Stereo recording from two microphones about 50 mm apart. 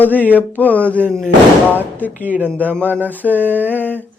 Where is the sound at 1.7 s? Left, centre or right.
Left.